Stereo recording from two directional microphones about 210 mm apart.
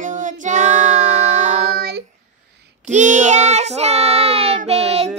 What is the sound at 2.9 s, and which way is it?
Child singing, 35° right (ahead or behind).